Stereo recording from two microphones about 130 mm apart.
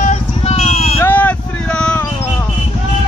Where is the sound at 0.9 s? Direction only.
15° left (ahead or behind).